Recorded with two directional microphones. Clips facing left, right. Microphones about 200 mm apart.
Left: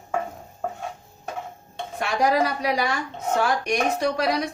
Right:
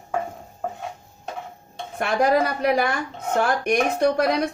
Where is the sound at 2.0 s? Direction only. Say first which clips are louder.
Right 2 dB; 55° right (ahead or behind).